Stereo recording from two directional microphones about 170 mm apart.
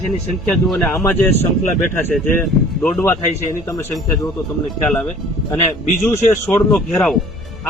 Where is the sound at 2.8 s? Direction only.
10° left (ahead or behind).